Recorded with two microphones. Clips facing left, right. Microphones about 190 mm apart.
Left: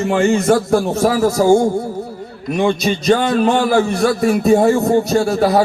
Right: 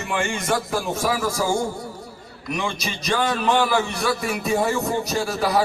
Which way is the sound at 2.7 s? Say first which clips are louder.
Left 12 dB; 35° left (ahead or behind).